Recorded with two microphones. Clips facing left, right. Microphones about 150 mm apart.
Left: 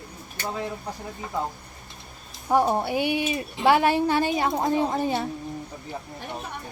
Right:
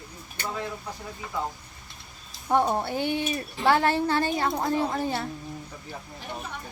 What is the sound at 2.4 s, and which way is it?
Speech, 10° left (ahead or behind).